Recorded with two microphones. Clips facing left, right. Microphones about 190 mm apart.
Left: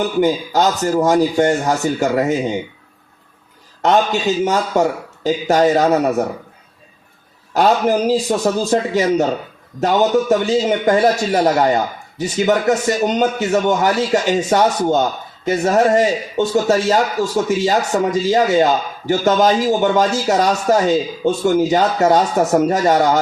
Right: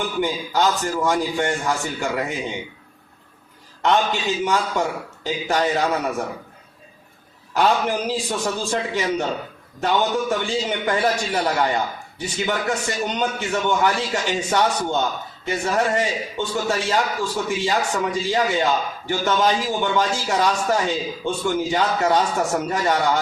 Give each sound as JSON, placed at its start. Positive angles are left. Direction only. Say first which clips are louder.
{"t": 0.0, "sound": "a man's voice", "louder": "left 8 dB", "side_deg": 40}
{"t": 3.8, "sound": "a man's voice", "louder": "left 5 dB", "side_deg": 40}
{"t": 7.5, "sound": "a man's voice", "louder": "left 5 dB", "side_deg": 40}